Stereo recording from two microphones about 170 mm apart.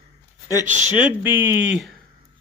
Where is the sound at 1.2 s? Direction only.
10° right (ahead or behind).